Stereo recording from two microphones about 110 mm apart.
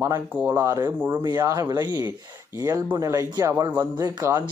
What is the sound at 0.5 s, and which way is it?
Speech, 25° right (ahead or behind).